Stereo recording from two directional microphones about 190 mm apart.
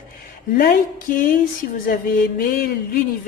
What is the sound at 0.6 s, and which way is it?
Speech, 50° left (ahead or behind).